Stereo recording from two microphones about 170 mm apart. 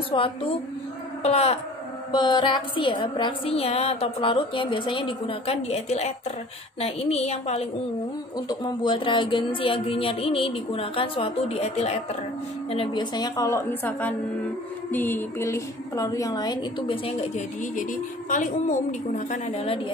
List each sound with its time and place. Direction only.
0.1 s a woman's voice: 30° left (ahead or behind)
8.5 s a woman's voice: 25° left (ahead or behind)
18.3 s a woman's voice: 45° left (ahead or behind)